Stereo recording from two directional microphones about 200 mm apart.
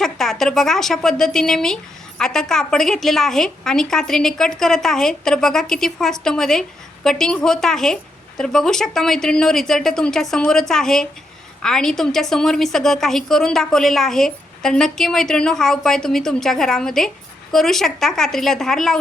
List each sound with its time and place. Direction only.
0.0 s a woman's voice: centre (ahead or behind)